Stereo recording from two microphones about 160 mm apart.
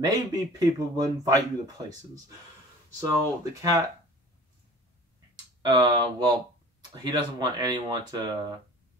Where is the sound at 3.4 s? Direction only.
20° right (ahead or behind).